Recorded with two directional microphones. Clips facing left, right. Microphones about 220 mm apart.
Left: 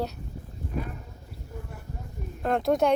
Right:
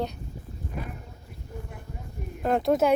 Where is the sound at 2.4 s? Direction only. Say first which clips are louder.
Right 1 dB; centre (ahead or behind).